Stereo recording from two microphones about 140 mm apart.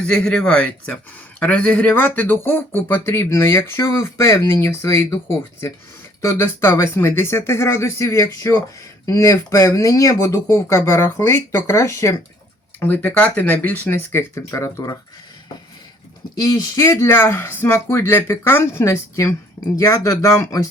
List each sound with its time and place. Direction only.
0.0 s speech: 5° left (ahead or behind)
6.2 s speech: 20° left (ahead or behind)
16.4 s speech: 25° left (ahead or behind)